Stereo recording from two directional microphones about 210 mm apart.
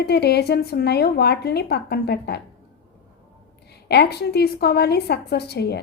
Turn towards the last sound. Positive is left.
turn(degrees=50)  # may be behind; listen again after turning